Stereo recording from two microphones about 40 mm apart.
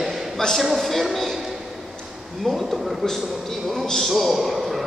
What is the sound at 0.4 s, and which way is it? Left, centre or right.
Speech, centre.